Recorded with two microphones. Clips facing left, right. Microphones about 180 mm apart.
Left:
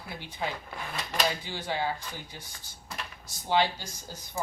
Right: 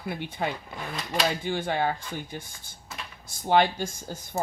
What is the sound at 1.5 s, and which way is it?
Speech, 55° right (ahead or behind).